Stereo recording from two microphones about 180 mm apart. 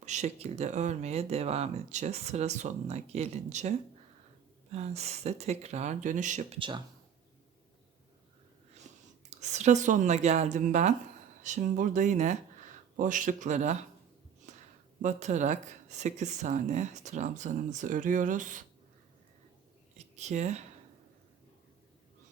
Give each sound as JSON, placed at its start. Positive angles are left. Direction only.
{"t": 0.0, "sound": "speech", "side_deg": -40}
{"t": 6.6, "sound": "speech", "side_deg": -25}
{"t": 9.4, "sound": "speech", "side_deg": -40}
{"t": 14.5, "sound": "a sound", "side_deg": -40}
{"t": 15.0, "sound": "speech", "side_deg": -40}
{"t": 20.1, "sound": "speech", "side_deg": -40}